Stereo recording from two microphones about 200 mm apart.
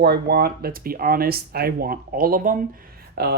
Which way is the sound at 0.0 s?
55° right (ahead or behind).